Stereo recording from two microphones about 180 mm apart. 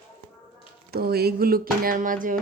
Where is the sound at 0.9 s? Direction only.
60° right (ahead or behind).